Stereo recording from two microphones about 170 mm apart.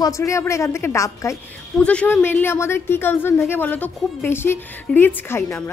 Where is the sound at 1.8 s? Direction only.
5° left (ahead or behind).